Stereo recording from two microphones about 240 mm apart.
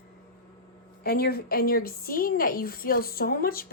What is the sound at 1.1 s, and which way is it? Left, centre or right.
A woman's voice, left.